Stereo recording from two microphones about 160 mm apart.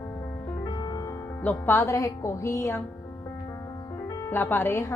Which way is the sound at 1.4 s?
10° left (ahead or behind).